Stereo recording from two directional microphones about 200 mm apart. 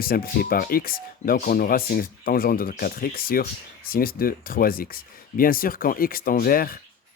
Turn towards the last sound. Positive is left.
turn(degrees=45)  # may be behind; listen again after turning